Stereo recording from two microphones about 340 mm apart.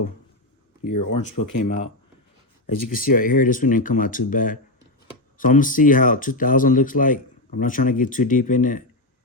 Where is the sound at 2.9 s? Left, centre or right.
Left.